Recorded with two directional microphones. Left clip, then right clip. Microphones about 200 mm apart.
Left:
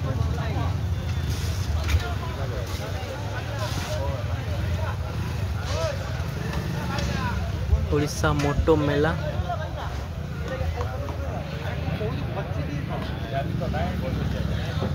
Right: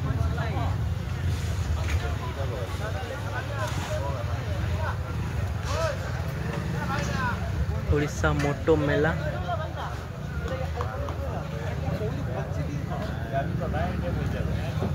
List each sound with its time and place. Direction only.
7.9 s speech: 10° left (ahead or behind)